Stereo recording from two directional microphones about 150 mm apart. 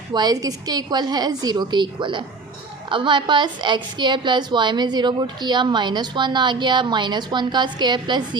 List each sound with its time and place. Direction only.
0.1 s a woman's voice: 25° right (ahead or behind)